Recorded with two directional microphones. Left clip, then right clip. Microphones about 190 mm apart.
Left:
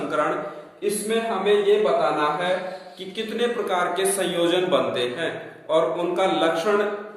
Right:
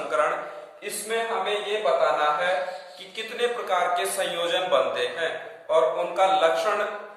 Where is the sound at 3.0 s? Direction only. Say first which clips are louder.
Left 2 dB; 15° left (ahead or behind).